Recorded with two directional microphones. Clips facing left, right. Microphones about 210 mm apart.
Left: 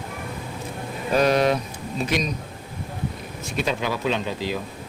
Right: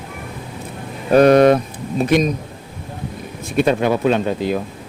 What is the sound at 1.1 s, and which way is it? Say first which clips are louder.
Speech: right 9 dB; 55° right (ahead or behind).